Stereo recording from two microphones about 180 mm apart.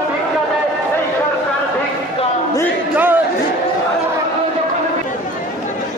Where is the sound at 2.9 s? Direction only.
10° right (ahead or behind).